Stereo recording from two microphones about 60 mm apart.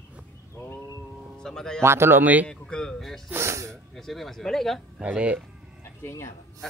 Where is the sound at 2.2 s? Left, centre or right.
Right.